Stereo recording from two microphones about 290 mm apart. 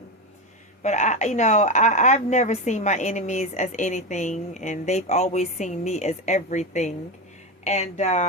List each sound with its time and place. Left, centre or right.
0.8 s a woman's voice: left